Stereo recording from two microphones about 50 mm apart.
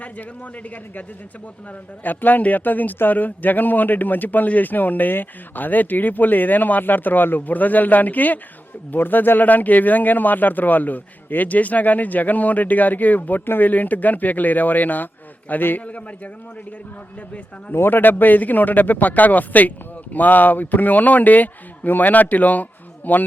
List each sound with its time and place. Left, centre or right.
0.0 s speech: left
2.0 s speech: left
17.7 s speech: left